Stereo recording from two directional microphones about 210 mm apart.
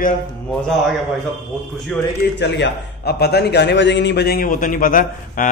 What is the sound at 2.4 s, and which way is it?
A man's voice, 50° left (ahead or behind).